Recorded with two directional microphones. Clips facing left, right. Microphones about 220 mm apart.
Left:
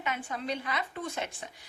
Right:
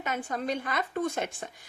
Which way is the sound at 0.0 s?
45° right (ahead or behind).